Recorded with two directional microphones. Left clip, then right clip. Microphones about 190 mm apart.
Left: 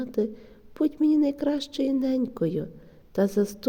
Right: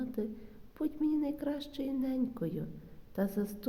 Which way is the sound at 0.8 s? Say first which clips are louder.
Left 10 dB; 45° left (ahead or behind).